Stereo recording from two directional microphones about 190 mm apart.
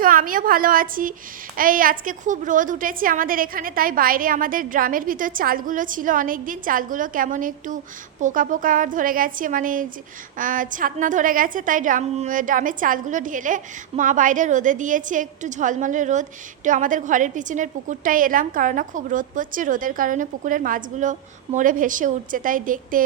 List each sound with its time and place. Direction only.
0.0 s a woman's voice: 45° right (ahead or behind)